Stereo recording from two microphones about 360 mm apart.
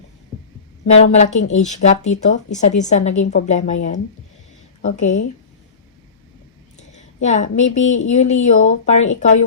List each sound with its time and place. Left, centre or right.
0.9 s a woman's voice: centre
6.7 s a woman's voice: centre